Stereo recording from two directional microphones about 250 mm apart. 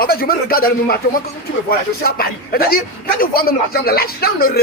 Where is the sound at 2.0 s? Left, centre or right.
Left.